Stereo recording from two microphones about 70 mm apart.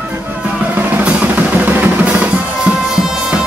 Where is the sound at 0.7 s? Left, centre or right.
Right.